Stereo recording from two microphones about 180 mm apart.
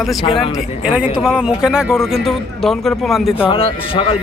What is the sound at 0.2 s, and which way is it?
Speech, 30° left (ahead or behind).